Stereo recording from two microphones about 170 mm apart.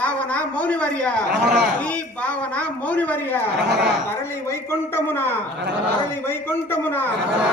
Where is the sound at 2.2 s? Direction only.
10° left (ahead or behind).